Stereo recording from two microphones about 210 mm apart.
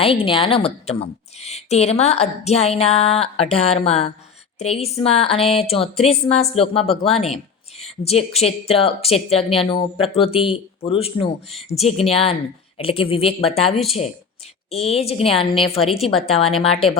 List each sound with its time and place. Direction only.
0.0 s speech: 25° left (ahead or behind)
14.7 s speech: 30° left (ahead or behind)
15.8 s a woman's voice: centre (ahead or behind)
16.6 s speech: 25° left (ahead or behind)